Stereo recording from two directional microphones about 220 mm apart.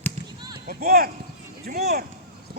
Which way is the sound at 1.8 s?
45° right (ahead or behind).